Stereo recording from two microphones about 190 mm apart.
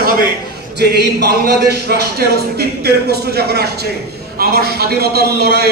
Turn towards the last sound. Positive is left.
turn(degrees=-55)  # may be behind; listen again after turning